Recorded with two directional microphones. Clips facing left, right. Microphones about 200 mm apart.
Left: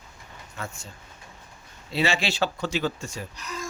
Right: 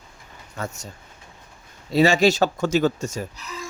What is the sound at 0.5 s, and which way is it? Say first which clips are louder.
Speech: right 6 dB; 40° right (ahead or behind).